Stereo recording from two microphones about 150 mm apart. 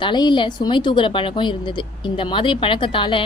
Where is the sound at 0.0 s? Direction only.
30° left (ahead or behind).